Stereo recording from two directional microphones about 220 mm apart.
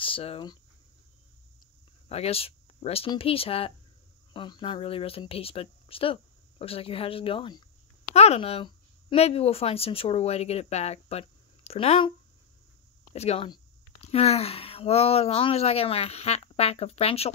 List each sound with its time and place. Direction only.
0.0 s speech: 25° left (ahead or behind)
2.0 s speech: 25° left (ahead or behind)
13.1 s speech: 30° left (ahead or behind)